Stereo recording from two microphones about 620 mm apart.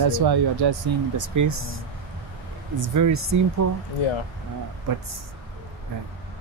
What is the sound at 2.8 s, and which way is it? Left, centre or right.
Speech, right.